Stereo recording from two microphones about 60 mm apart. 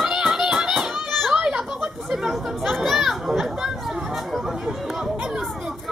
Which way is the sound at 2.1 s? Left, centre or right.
Centre.